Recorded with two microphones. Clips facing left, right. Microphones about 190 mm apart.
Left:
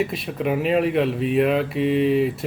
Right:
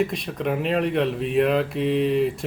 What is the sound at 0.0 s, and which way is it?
Speech, 5° left (ahead or behind).